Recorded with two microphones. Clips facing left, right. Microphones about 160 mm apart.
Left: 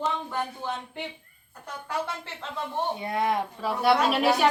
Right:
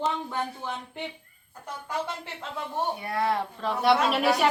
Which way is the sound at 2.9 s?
20° left (ahead or behind).